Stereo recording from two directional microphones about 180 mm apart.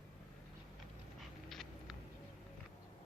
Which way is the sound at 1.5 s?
Centre (ahead or behind).